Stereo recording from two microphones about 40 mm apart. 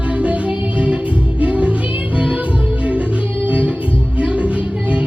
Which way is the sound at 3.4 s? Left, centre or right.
Right.